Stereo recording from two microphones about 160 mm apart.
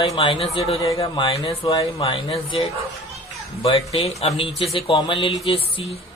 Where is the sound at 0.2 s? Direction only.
35° left (ahead or behind).